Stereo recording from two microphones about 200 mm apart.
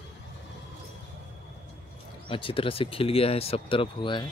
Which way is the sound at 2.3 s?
25° left (ahead or behind).